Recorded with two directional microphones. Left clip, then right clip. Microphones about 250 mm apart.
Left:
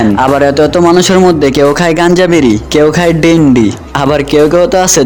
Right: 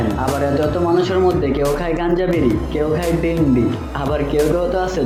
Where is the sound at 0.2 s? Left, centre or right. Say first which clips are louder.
Left 12 dB; left.